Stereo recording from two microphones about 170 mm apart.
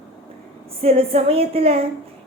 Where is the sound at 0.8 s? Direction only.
35° right (ahead or behind).